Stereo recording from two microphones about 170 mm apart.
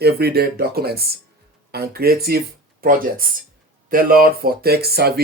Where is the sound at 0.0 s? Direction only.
70° right (ahead or behind).